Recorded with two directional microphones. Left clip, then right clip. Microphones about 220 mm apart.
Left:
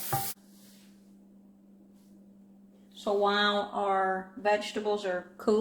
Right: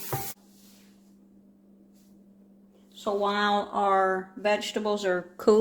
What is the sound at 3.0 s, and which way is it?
Speech, 30° right (ahead or behind).